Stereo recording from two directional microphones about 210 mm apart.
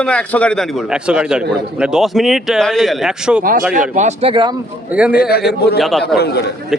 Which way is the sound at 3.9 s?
30° right (ahead or behind).